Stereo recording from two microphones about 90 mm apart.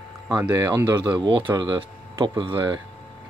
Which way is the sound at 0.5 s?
40° right (ahead or behind).